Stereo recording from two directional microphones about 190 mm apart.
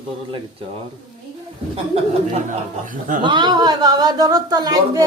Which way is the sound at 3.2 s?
25° right (ahead or behind).